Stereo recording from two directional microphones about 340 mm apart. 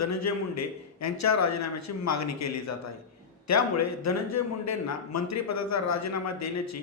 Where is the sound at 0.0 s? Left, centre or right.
Left.